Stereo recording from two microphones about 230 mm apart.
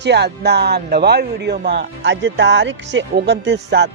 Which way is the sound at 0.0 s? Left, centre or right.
Right.